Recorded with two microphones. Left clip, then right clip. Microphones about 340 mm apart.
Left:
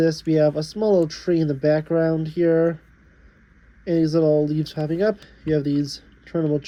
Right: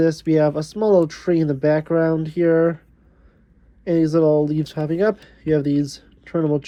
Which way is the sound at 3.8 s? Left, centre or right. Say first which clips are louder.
Right 2 dB; centre.